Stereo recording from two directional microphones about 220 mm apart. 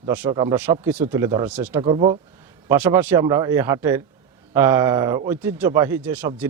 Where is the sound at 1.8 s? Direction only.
25° right (ahead or behind).